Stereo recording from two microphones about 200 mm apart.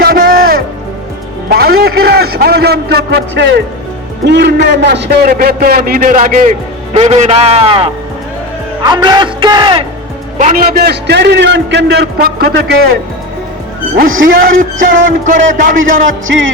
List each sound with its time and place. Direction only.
0.0 s music: 50° right (ahead or behind)
1.5 s a sound: 50° right (ahead or behind)
4.3 s a man's voice: 60° right (ahead or behind); by 9.8 s 25° right (ahead or behind)
10.3 s a man's voice: 40° right (ahead or behind)
14.2 s a man's voice: 45° right (ahead or behind)
16.2 s music: 70° right (ahead or behind)